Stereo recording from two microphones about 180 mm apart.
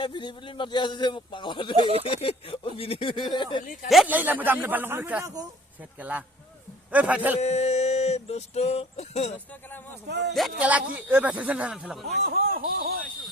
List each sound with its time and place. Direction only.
0.0 s speech: 25° left (ahead or behind)
3.8 s speech: 5° right (ahead or behind)
7.4 s a sound: 40° left (ahead or behind)
9.5 s speech: 10° left (ahead or behind)
10.1 s speech: 70° right (ahead or behind)
10.3 s speech: 5° right (ahead or behind)
12.3 s speech: 55° right (ahead or behind)